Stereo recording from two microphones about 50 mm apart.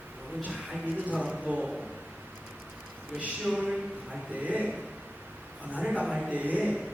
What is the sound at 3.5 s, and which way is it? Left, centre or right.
A man's voice, right.